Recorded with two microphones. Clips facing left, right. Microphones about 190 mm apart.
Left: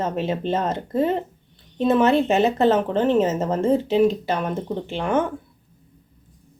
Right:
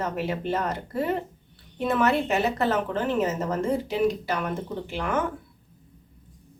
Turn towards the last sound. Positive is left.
turn(degrees=25)  # may be behind; listen again after turning